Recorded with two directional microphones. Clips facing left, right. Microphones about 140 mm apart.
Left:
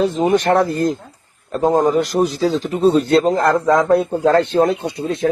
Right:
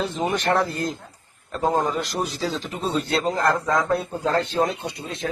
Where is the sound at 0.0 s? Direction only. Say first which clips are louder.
Left 9 dB; 45° left (ahead or behind).